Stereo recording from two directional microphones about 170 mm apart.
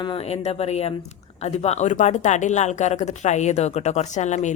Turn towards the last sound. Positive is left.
turn(degrees=45)  # may be behind; listen again after turning